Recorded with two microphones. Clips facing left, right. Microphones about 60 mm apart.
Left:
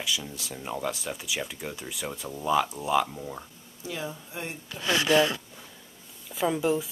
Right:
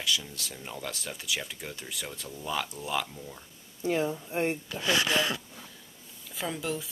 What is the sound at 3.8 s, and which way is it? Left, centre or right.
Speech, right.